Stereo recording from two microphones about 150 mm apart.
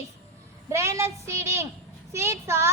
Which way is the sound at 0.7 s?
20° right (ahead or behind).